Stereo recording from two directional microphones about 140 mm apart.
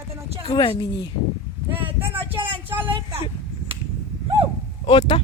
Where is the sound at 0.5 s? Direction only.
35° left (ahead or behind).